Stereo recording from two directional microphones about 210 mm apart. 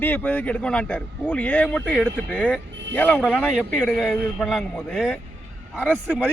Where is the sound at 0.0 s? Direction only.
10° left (ahead or behind).